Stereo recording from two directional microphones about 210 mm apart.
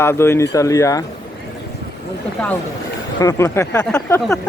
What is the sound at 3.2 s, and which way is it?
Speech, 15° left (ahead or behind).